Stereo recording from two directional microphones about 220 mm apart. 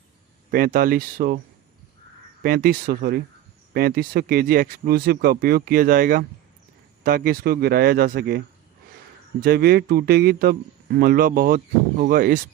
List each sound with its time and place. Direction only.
0.5 s speech: 40° right (ahead or behind)
2.4 s speech: 40° right (ahead or behind)
9.4 s speech: 45° right (ahead or behind)